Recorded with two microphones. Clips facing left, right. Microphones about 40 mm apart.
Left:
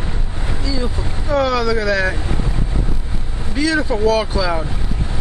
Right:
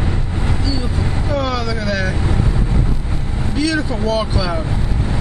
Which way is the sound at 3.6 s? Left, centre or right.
Centre.